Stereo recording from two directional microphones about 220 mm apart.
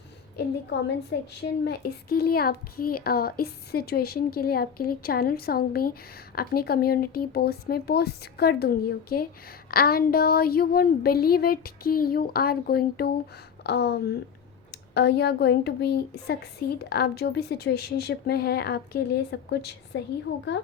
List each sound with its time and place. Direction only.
1.3 s a child's voice: 50° left (ahead or behind)